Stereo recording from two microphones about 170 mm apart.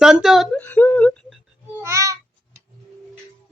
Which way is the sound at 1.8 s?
15° right (ahead or behind).